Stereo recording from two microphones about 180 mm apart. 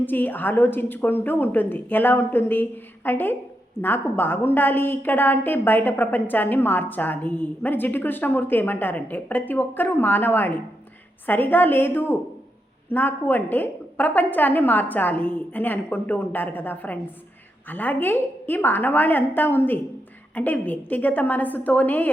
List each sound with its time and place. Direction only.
0.0 s a woman's voice: 10° left (ahead or behind)